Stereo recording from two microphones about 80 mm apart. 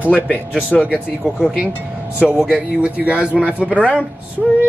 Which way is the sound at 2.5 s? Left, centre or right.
Centre.